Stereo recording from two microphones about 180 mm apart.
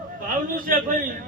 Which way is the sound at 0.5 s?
50° right (ahead or behind).